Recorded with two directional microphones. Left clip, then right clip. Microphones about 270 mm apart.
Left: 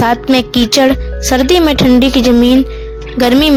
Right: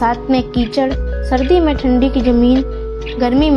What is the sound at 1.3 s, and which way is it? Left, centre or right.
Speech, left.